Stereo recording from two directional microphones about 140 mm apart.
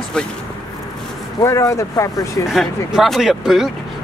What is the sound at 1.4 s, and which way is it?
Speech, 20° left (ahead or behind).